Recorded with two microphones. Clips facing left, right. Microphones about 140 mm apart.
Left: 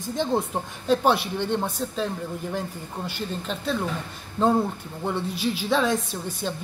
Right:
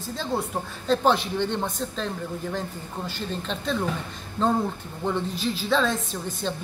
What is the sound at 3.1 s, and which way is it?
A woman's voice, 5° left (ahead or behind).